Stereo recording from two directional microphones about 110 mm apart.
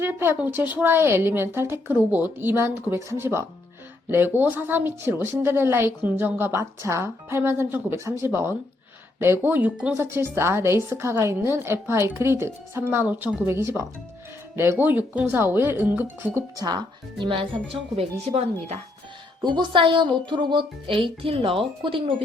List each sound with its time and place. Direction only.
0.0 s a woman's voice: 20° right (ahead or behind)
16.6 s speech: 40° right (ahead or behind)
18.3 s speech: 65° right (ahead or behind)
19.4 s speech: 45° right (ahead or behind)